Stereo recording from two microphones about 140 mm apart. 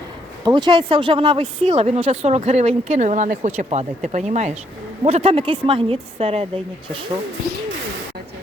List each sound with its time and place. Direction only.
0.4 s speech: 35° right (ahead or behind)